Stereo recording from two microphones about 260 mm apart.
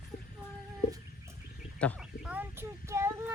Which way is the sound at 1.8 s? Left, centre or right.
Centre.